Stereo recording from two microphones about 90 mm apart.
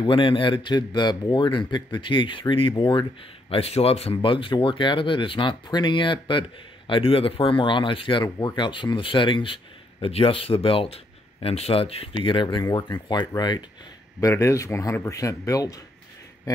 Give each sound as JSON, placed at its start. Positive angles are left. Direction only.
{"t": 0.0, "sound": "speech", "side_deg": 75}
{"t": 6.9, "sound": "speech", "side_deg": 90}
{"t": 14.3, "sound": "speech", "side_deg": 35}